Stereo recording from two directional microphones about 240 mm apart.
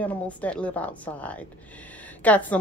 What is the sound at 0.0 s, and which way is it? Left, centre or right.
A woman's voice, centre.